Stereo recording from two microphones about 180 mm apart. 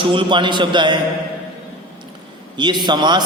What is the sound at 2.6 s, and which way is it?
Speech, 25° right (ahead or behind).